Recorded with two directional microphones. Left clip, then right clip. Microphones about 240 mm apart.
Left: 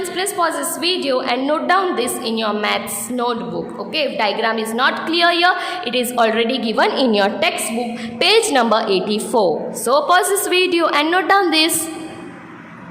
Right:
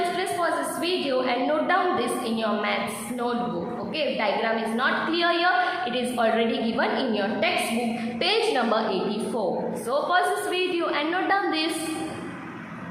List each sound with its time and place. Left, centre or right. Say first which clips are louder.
0.2 s a woman's voice: left 6 dB; left
3.9 s a woman's voice: left 7 dB; left